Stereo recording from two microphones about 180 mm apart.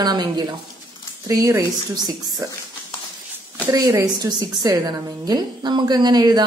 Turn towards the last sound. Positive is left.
turn(degrees=-20)  # may be behind; listen again after turning